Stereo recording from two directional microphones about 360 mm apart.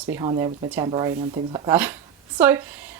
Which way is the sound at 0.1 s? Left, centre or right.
Centre.